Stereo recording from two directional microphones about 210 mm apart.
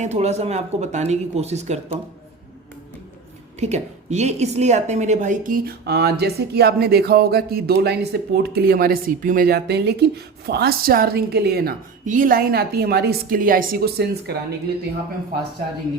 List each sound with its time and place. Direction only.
0.0 s speech: 30° right (ahead or behind)
3.6 s a woman's voice: 30° right (ahead or behind); by 14.3 s 50° right (ahead or behind)